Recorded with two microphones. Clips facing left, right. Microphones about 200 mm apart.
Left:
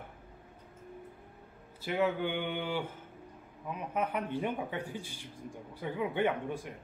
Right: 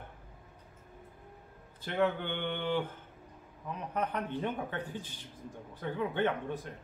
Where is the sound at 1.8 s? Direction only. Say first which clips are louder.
Even; 10° left (ahead or behind).